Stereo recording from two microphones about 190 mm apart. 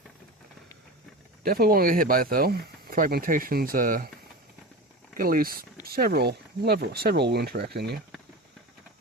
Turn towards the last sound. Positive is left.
turn(degrees=-60)  # may be behind; listen again after turning